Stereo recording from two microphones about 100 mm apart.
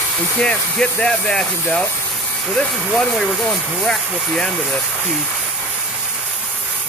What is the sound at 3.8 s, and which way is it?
Speech, 10° left (ahead or behind).